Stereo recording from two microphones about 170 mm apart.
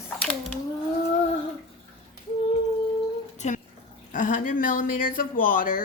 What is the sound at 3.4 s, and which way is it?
Speech, 40° left (ahead or behind).